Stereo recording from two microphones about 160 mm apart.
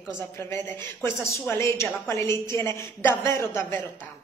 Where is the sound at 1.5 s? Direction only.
15° left (ahead or behind).